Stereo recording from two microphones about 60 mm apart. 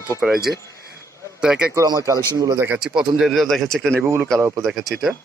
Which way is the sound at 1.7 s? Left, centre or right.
Right.